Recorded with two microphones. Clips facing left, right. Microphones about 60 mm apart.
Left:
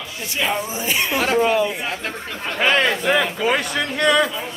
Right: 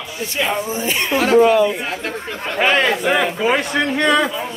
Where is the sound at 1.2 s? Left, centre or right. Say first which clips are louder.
Right 7 dB; right.